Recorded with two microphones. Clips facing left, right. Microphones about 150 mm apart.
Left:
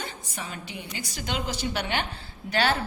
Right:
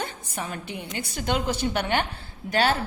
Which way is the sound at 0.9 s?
55° right (ahead or behind).